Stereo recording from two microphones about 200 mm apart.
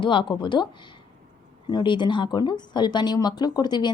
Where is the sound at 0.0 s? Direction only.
25° left (ahead or behind).